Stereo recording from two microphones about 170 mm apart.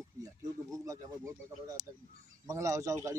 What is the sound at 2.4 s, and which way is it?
Speech, 20° right (ahead or behind).